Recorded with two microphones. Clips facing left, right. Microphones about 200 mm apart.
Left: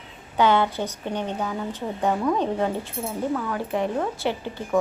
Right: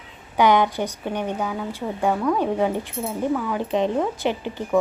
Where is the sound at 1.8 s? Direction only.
5° left (ahead or behind).